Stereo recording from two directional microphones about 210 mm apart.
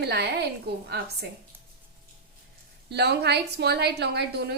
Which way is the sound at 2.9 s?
50° right (ahead or behind).